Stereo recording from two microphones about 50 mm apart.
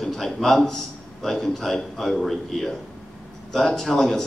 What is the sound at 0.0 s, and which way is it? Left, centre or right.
A man's voice, centre.